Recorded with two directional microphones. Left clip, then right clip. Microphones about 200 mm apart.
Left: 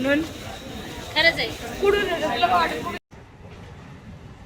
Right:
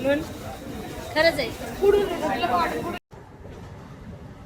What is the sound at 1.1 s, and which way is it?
Speech, 60° right (ahead or behind).